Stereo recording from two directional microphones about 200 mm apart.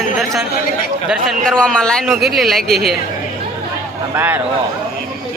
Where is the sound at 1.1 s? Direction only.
Centre (ahead or behind).